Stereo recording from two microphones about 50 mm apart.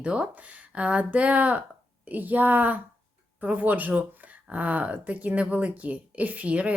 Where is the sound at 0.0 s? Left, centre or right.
Right.